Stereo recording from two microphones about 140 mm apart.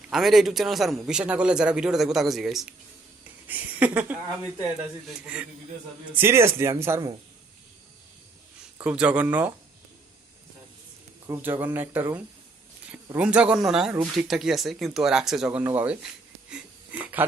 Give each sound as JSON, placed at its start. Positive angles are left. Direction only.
{"t": 0.1, "sound": "a man's voice", "side_deg": 0}
{"t": 6.1, "sound": "speech", "side_deg": -20}
{"t": 8.8, "sound": "speech", "side_deg": -10}
{"t": 11.3, "sound": "a man's voice", "side_deg": -15}
{"t": 17.0, "sound": "speech", "side_deg": -10}